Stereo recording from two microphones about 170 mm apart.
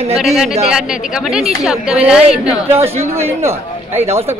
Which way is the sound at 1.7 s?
5° right (ahead or behind).